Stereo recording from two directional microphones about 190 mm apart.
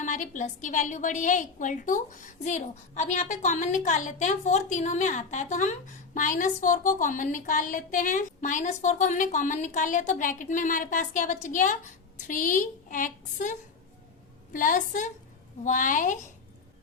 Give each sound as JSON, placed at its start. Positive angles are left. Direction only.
{"t": 0.0, "sound": "a woman's voice", "side_deg": 40}